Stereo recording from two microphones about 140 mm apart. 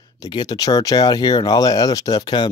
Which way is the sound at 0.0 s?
35° left (ahead or behind).